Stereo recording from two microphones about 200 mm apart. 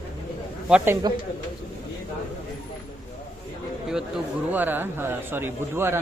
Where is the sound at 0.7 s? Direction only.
10° right (ahead or behind).